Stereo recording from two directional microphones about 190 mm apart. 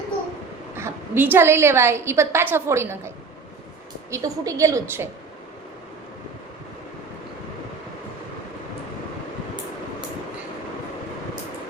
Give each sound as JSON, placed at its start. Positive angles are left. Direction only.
{"t": 0.8, "sound": "a woman's voice", "side_deg": -10}
{"t": 4.1, "sound": "a woman's voice", "side_deg": -15}